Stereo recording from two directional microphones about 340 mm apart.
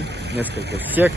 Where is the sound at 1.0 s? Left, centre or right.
Centre.